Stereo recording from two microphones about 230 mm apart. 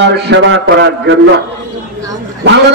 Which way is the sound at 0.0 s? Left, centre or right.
Right.